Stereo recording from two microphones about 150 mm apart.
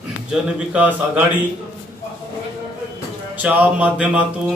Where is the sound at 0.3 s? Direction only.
10° right (ahead or behind).